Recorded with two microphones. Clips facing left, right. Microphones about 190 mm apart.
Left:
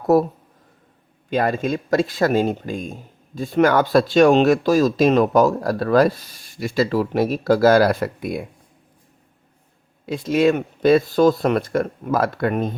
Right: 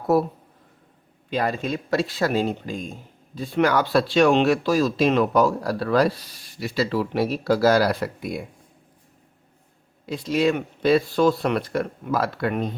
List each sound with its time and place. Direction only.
1.3 s speech: 50° left (ahead or behind)
10.1 s speech: 50° left (ahead or behind)